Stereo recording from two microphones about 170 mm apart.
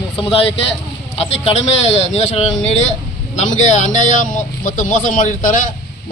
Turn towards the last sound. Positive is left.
turn(degrees=50)  # may be behind; listen again after turning